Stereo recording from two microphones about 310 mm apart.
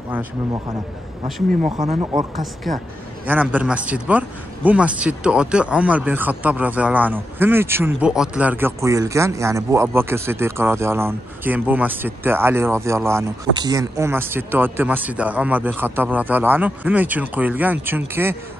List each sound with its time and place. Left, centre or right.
1.8 s speech: right
2.3 s a man's voice: centre